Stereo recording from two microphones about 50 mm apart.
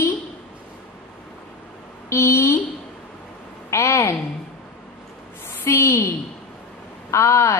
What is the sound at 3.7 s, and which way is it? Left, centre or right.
Speech, left.